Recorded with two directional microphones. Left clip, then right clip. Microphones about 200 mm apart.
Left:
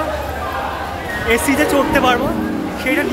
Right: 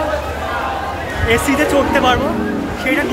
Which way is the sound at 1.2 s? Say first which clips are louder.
Right 1 dB; 10° left (ahead or behind).